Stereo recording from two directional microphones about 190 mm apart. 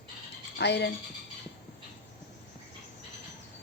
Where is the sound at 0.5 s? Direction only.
60° left (ahead or behind).